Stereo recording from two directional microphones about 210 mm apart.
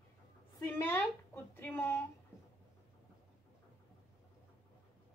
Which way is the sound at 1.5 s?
10° left (ahead or behind).